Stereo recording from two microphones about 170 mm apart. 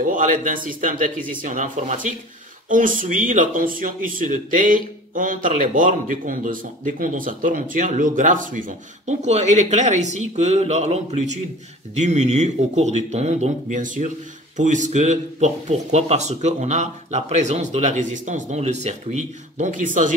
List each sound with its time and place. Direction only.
0.0 s speech: 50° right (ahead or behind)